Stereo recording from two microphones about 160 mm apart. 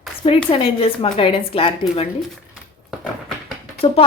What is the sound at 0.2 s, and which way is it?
A woman's voice, 35° left (ahead or behind).